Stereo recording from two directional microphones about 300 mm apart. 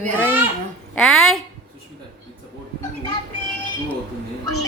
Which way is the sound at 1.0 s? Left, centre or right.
Centre.